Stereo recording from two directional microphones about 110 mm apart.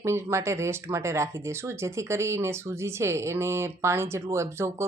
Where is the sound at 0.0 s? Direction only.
25° right (ahead or behind).